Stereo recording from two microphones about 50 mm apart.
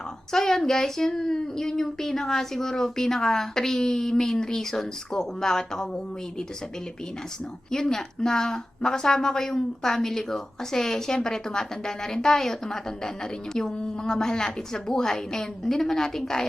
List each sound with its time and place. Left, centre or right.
0.3 s speech: centre
7.7 s speech: centre